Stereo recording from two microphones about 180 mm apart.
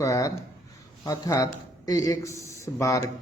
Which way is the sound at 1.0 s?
15° left (ahead or behind).